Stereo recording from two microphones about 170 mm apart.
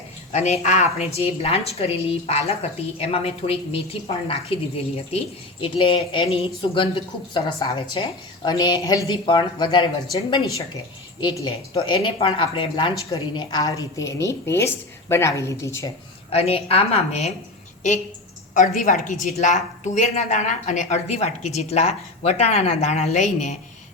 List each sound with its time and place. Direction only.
0.3 s a woman's voice: 40° left (ahead or behind)
5.6 s a woman's voice: 30° left (ahead or behind)
12.0 s a woman's voice: 30° left (ahead or behind)
16.3 s a woman's voice: 35° left (ahead or behind)
18.5 s a woman's voice: 50° left (ahead or behind)